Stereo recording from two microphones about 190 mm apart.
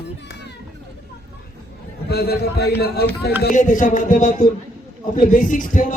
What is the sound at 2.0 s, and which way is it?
A man's voice, 60° left (ahead or behind).